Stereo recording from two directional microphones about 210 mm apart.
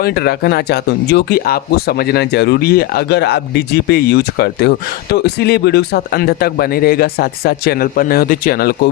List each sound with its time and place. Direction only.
0.0 s speech: 50° left (ahead or behind)